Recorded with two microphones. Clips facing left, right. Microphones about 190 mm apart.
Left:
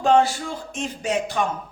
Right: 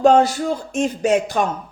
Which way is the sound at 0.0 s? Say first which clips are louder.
Right 4 dB; 45° right (ahead or behind).